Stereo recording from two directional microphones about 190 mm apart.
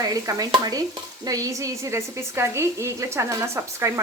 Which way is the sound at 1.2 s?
20° right (ahead or behind).